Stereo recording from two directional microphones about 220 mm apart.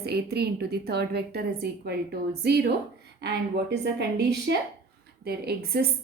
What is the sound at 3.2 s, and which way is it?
A woman's voice, 50° right (ahead or behind).